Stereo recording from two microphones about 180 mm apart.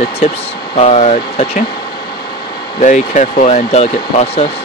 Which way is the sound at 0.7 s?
35° left (ahead or behind).